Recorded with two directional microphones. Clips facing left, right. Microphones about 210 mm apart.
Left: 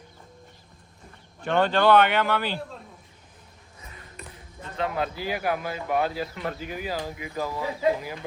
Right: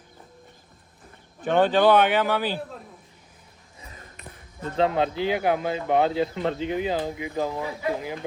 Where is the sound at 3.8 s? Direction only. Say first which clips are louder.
Right 1 dB; 35° right (ahead or behind).